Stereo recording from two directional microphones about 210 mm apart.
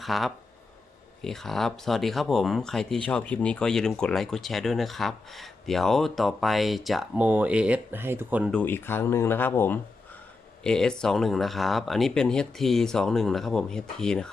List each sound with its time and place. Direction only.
0.0 s speech: centre (ahead or behind)
8.5 s speech: 10° left (ahead or behind)